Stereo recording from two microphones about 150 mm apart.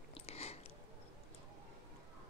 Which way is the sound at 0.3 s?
45° left (ahead or behind).